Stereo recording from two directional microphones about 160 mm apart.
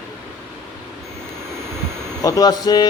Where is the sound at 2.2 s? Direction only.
25° left (ahead or behind).